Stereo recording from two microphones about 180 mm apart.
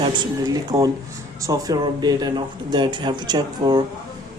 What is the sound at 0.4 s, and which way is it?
Speech, 20° right (ahead or behind).